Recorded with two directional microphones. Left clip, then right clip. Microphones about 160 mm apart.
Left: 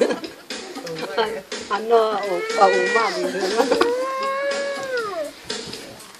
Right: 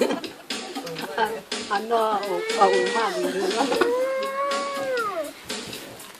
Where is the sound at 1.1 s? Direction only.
50° left (ahead or behind).